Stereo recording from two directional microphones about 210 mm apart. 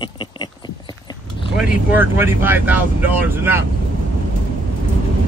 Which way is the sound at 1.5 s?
5° right (ahead or behind).